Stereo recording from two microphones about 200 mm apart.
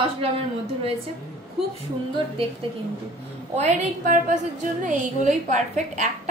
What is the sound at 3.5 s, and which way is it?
A woman's voice, 35° right (ahead or behind).